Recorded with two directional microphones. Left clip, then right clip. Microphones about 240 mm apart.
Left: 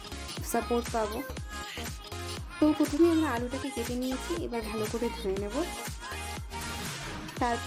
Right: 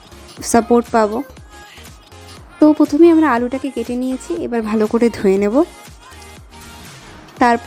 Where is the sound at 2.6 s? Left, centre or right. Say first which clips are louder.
Right 15 dB; right.